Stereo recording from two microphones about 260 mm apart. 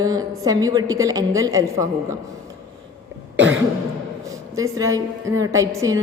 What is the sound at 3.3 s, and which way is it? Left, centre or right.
Cough, right.